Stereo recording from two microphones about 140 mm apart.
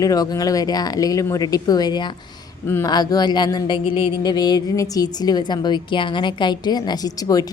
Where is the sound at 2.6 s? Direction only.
15° left (ahead or behind).